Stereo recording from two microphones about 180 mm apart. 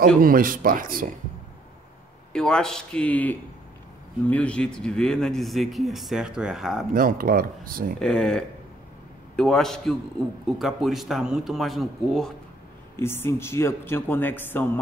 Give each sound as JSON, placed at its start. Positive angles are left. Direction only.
{"t": 0.2, "sound": "speech", "side_deg": -50}
{"t": 2.3, "sound": "speech", "side_deg": 5}
{"t": 6.9, "sound": "speech", "side_deg": -50}
{"t": 8.0, "sound": "speech", "side_deg": 5}
{"t": 12.9, "sound": "speech", "side_deg": 15}